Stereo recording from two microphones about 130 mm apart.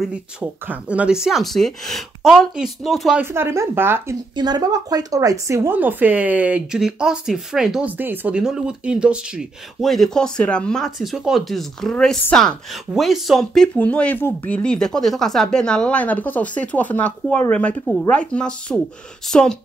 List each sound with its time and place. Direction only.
0.1 s speech: 10° right (ahead or behind)
3.2 s speech: 20° right (ahead or behind)
4.4 s a woman's voice: 30° right (ahead or behind); by 7.9 s 5° right (ahead or behind)
8.0 s a woman's voice: 15° right (ahead or behind); by 19.5 s 5° left (ahead or behind)